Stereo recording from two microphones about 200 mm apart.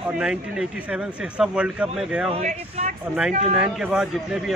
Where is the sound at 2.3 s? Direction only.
35° right (ahead or behind).